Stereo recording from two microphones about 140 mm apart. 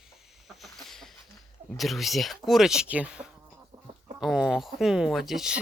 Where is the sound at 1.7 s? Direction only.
Centre (ahead or behind).